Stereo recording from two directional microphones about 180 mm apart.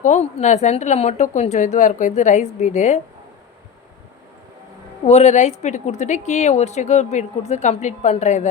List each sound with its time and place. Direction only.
0.0 s a woman's voice: 40° left (ahead or behind)
5.0 s a woman's voice: 35° left (ahead or behind)